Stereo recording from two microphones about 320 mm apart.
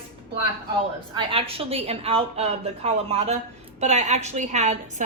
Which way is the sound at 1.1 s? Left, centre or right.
Centre.